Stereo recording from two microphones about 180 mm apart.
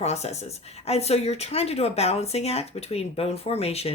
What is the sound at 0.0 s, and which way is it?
Speech, 35° left (ahead or behind).